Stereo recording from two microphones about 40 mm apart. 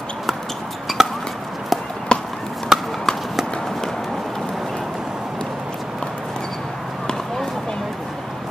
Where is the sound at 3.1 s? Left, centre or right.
Centre.